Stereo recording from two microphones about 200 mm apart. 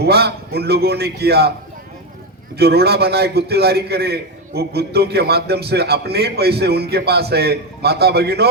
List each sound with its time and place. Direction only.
0.0 s a man's voice: 55° right (ahead or behind)
2.6 s a man's voice: 50° right (ahead or behind)